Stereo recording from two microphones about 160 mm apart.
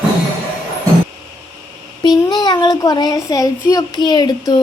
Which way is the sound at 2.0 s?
25° left (ahead or behind).